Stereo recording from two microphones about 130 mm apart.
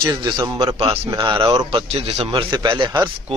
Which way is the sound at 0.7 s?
50° right (ahead or behind).